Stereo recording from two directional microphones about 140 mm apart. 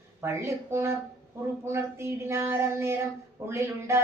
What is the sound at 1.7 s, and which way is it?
Speech, 20° right (ahead or behind).